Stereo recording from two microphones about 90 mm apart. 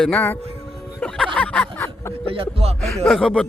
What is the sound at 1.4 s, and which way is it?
Speech, 10° left (ahead or behind).